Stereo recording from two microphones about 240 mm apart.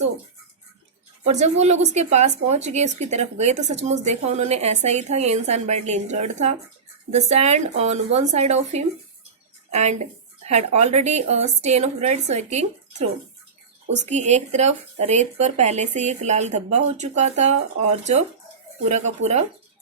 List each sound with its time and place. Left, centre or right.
1.2 s speech: right
19.2 s speech: right